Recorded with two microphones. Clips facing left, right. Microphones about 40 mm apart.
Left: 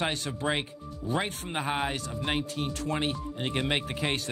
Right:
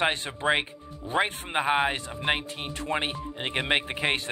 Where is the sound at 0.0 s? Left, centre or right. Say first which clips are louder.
Right 4 dB; right.